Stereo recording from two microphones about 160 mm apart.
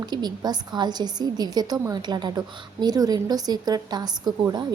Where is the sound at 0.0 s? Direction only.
25° right (ahead or behind).